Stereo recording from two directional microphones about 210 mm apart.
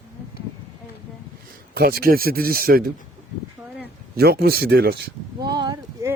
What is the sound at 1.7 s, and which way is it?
A man's voice, 45° right (ahead or behind).